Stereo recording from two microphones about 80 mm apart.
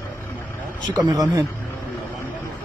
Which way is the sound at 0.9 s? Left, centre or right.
Right.